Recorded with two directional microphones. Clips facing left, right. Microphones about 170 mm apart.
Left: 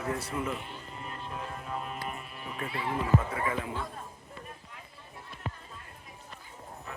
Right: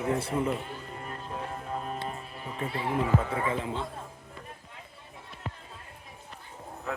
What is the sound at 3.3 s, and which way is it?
Speech, 25° right (ahead or behind).